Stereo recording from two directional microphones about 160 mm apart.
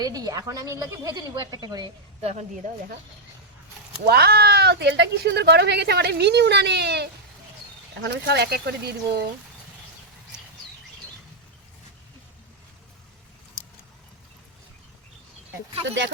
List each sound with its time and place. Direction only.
0.0 s a woman's voice: 25° right (ahead or behind)
2.2 s speech: 45° right (ahead or behind)
4.0 s speech: 80° right